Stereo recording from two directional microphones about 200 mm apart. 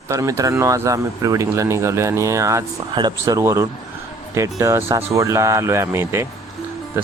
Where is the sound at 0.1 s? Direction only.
15° right (ahead or behind).